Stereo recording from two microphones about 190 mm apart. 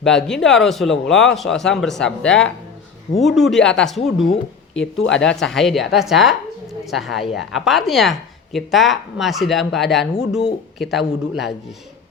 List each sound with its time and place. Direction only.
0.0 s speech: centre (ahead or behind)
4.7 s speech: 75° left (ahead or behind)
5.2 s speech: 5° left (ahead or behind)